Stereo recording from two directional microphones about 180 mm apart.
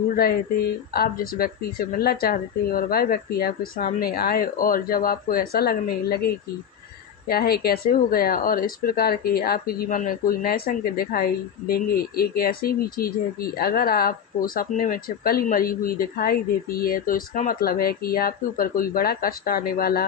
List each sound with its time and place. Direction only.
0.1 s speech: 55° left (ahead or behind)